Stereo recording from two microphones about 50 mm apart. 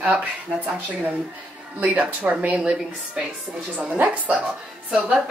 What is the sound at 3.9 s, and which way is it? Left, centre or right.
Speech, right.